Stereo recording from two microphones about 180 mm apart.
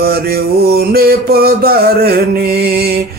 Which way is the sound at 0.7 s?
55° right (ahead or behind).